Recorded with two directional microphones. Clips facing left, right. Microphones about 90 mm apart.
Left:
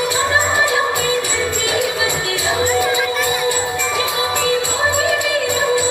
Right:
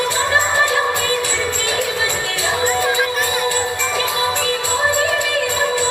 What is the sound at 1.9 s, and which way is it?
Music, 15° left (ahead or behind).